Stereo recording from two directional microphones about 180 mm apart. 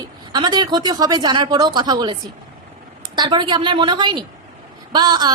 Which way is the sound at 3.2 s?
25° right (ahead or behind).